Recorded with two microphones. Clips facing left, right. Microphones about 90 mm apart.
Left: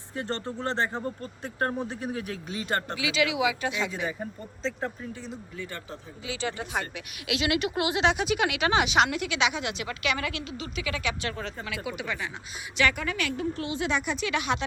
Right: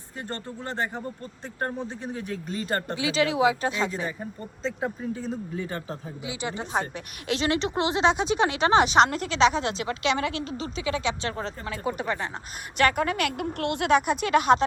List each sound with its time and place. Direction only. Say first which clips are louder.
2.5 s speech: right 1 dB; centre (ahead or behind)
2.9 s speech: right 4 dB; 35° right (ahead or behind)
4.6 s speech: right 1 dB; 5° right (ahead or behind)
6.2 s speech: even; 20° right (ahead or behind)
6.7 s speech: right 4 dB; 35° right (ahead or behind)
12.7 s a woman's voice: right 4 dB; 50° right (ahead or behind)